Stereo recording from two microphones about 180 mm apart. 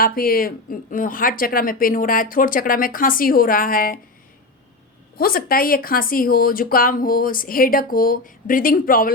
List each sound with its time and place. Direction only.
0.0 s a woman's voice: 55° left (ahead or behind)
5.1 s a woman's voice: 55° left (ahead or behind)